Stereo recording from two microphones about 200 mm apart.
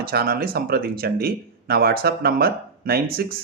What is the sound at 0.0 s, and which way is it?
Speech, 50° right (ahead or behind).